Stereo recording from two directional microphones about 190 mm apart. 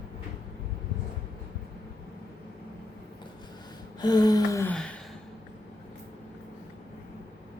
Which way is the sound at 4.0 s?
20° left (ahead or behind).